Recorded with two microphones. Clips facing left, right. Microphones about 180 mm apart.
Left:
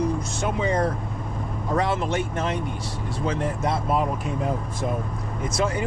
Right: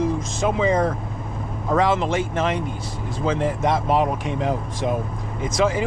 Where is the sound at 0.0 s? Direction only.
90° right.